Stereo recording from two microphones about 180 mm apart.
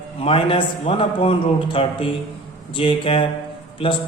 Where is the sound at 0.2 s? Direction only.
30° left (ahead or behind).